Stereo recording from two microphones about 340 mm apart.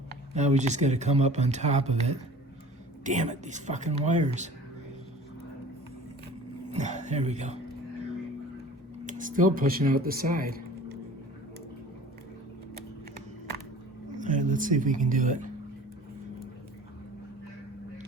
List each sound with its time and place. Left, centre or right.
0.3 s speech: centre
6.7 s speech: right
9.0 s speech: right
14.2 s speech: right